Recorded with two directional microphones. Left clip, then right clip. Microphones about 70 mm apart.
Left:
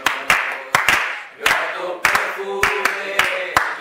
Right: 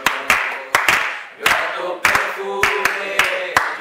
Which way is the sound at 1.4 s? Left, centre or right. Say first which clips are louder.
Right 1 dB; centre.